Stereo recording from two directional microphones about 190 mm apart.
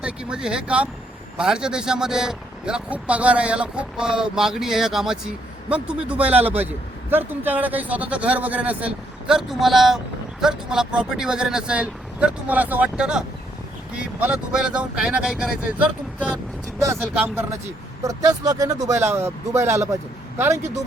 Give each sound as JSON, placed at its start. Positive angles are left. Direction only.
{"t": 0.0, "sound": "speech", "side_deg": -5}
{"t": 17.2, "sound": "speech", "side_deg": -10}
{"t": 20.6, "sound": "speech", "side_deg": -35}